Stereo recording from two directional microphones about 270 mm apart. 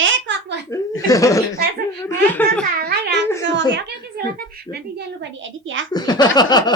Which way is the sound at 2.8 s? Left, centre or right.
Right.